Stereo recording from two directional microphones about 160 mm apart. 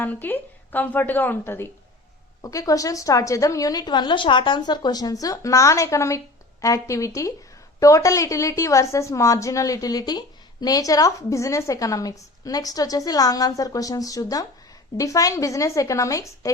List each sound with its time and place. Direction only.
0.0 s a woman's voice: 10° left (ahead or behind)